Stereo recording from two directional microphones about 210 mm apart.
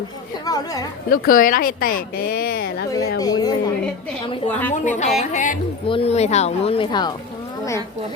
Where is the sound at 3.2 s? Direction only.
20° left (ahead or behind).